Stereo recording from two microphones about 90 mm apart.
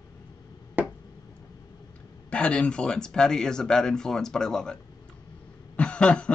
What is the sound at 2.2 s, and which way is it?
Speech, 10° left (ahead or behind).